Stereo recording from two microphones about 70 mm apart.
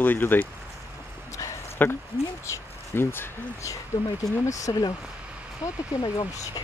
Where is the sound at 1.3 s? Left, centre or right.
Left.